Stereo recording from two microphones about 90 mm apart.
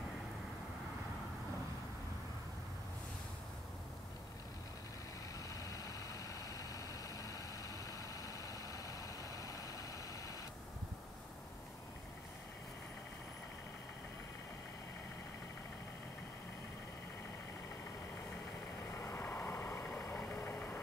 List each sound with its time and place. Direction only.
5.5 s vehicle: 40° left (ahead or behind)
18.9 s vehicle: 30° left (ahead or behind)